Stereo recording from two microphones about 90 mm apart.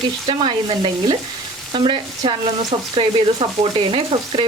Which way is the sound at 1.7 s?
70° right (ahead or behind).